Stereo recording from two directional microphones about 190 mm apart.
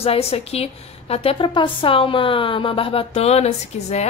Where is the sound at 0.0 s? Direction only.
30° left (ahead or behind).